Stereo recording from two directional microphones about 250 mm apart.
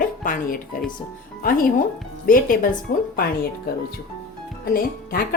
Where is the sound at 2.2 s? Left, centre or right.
Left.